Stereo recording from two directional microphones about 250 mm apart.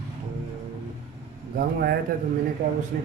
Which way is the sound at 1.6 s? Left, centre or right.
Right.